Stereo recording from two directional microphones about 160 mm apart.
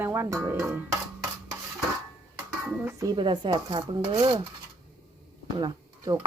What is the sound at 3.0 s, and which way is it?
Speech, 25° right (ahead or behind).